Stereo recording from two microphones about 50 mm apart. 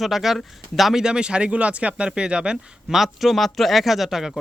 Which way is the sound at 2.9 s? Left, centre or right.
Centre.